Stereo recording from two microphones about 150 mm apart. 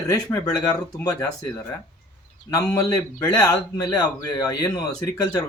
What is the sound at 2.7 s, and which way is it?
Speech, 25° left (ahead or behind).